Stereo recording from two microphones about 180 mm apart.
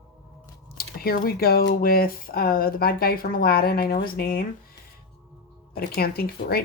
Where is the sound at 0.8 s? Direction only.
55° left (ahead or behind).